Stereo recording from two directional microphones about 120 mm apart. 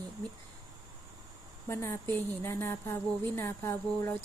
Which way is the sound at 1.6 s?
20° left (ahead or behind).